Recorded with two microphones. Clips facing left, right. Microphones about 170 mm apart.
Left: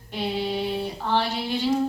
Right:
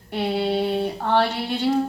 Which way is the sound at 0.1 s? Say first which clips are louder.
Right 4 dB; 60° right (ahead or behind).